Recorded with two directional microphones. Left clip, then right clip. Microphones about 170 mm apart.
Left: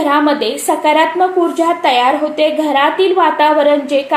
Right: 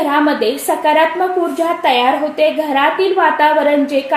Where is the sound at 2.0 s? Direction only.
30° left (ahead or behind).